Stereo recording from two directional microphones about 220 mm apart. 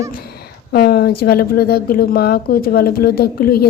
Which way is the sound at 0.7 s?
45° left (ahead or behind).